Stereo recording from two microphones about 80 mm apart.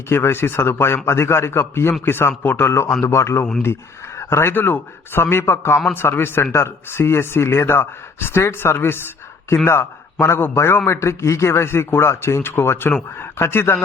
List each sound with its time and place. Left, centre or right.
0.1 s a man's voice: left